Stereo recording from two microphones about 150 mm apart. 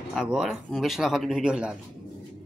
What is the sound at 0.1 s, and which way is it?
Speech, 5° right (ahead or behind).